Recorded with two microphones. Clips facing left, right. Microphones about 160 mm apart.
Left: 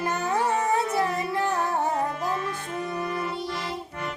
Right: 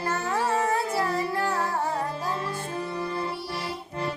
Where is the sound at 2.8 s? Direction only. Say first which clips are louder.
Left 2 dB; 30° right (ahead or behind).